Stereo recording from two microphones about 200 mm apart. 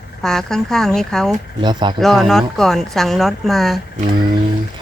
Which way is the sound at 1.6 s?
20° right (ahead or behind).